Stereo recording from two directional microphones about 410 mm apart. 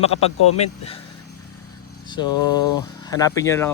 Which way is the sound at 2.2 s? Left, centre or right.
Left.